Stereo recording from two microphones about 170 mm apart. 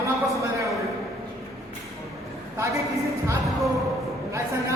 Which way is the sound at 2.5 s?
15° right (ahead or behind).